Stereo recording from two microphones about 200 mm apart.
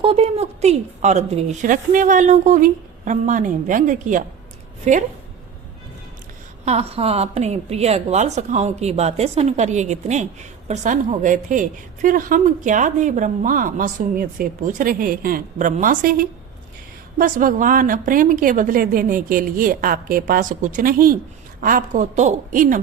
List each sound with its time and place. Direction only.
0.0 s a woman's voice: 30° right (ahead or behind)
6.7 s a woman's voice: 30° right (ahead or behind)